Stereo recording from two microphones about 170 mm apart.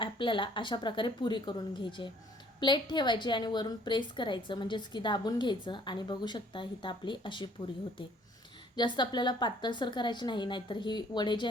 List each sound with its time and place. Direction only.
0.0 s a woman's voice: 30° left (ahead or behind)
8.7 s a woman's voice: 25° left (ahead or behind)